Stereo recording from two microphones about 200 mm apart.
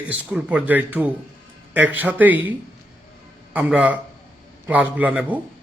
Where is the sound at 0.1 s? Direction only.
5° right (ahead or behind).